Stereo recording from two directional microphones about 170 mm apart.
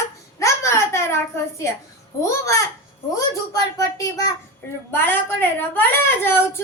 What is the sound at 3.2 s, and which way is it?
A child's voice, 20° left (ahead or behind).